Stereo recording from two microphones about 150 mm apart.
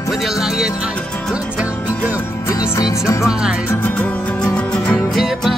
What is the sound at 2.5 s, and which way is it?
Music, 20° left (ahead or behind).